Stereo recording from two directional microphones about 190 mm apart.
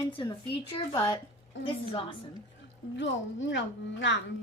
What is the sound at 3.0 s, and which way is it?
A woman's voice, 70° left (ahead or behind).